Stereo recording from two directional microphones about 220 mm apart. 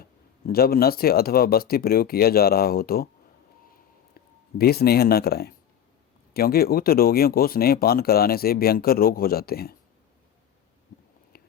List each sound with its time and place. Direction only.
0.0 s speech: 45° left (ahead or behind)
4.5 s speech: 45° left (ahead or behind)